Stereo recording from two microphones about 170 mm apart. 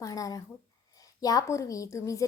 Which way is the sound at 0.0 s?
20° left (ahead or behind).